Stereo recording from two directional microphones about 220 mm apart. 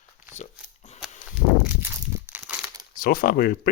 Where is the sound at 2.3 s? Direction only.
5° right (ahead or behind).